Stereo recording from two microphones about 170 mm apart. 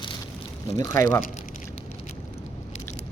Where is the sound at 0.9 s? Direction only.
20° left (ahead or behind).